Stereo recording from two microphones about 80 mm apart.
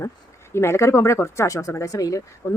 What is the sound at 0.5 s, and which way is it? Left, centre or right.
Speech, left.